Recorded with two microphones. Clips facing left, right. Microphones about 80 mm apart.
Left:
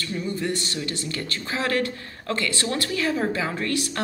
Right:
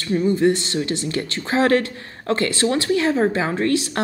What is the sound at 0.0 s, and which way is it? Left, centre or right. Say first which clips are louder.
A woman's voice: right 10 dB; right.